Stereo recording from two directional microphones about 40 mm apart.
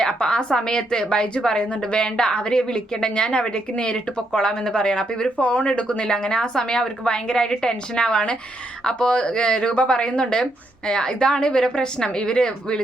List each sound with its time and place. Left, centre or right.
0.0 s speech: centre
5.4 s speech: left